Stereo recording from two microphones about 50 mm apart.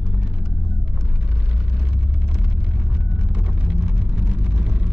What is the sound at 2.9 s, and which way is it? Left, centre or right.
Vehicle, right.